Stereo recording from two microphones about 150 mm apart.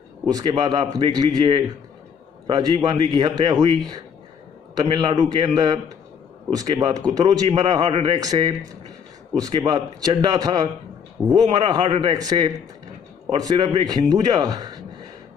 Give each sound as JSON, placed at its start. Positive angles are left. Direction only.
{"t": 0.3, "sound": "speech", "side_deg": -25}